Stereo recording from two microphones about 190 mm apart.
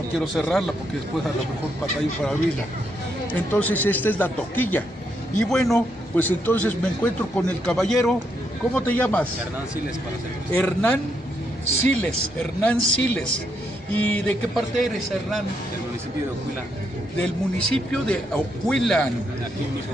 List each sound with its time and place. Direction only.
0.2 s a man's voice: centre (ahead or behind)
3.3 s a man's voice: 5° left (ahead or behind)
10.5 s speech: 5° left (ahead or behind)
17.2 s a man's voice: 5° left (ahead or behind)